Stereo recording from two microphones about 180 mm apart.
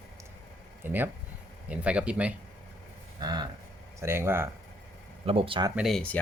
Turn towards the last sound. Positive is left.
turn(degrees=5)  # may be behind; listen again after turning